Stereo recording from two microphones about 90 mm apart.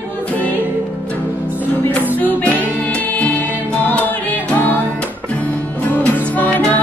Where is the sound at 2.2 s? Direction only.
20° left (ahead or behind).